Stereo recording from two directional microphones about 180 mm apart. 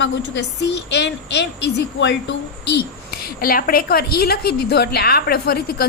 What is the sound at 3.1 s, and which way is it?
A woman's voice, 60° left (ahead or behind).